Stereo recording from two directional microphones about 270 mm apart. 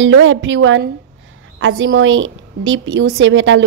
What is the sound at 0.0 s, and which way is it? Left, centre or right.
Speech, right.